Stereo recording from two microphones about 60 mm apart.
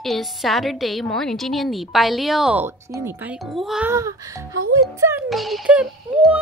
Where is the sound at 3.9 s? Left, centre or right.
Right.